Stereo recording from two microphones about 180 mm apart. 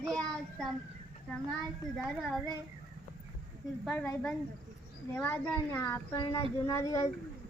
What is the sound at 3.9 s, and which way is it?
A child's voice, 5° left (ahead or behind).